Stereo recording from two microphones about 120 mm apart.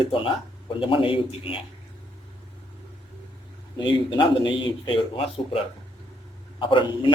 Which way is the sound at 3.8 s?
40° left (ahead or behind).